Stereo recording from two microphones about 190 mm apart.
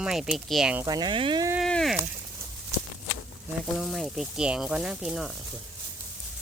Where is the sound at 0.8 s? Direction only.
20° right (ahead or behind).